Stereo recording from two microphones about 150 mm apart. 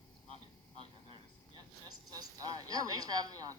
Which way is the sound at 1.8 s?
25° right (ahead or behind).